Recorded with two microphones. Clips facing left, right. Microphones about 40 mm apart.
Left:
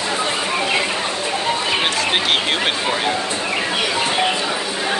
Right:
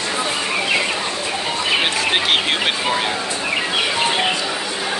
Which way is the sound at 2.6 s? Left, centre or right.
Centre.